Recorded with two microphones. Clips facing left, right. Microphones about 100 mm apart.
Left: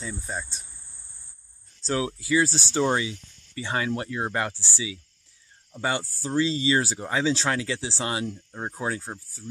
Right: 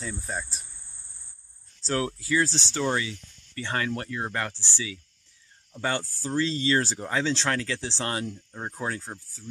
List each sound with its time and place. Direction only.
0.0 s speech: centre (ahead or behind)
1.8 s speech: 5° left (ahead or behind)